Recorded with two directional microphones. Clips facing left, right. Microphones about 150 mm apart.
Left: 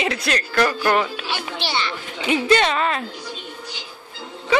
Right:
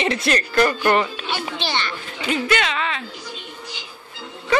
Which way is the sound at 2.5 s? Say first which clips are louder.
Left 4 dB; 40° left (ahead or behind).